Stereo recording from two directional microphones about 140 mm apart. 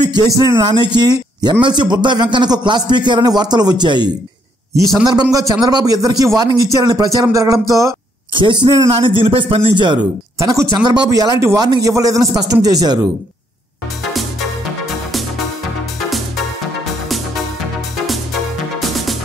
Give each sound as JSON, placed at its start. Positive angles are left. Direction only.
{"t": 0.0, "sound": "a man's voice", "side_deg": -30}
{"t": 8.3, "sound": "a man's voice", "side_deg": -35}
{"t": 10.4, "sound": "speech", "side_deg": -20}
{"t": 18.0, "sound": "music", "side_deg": 0}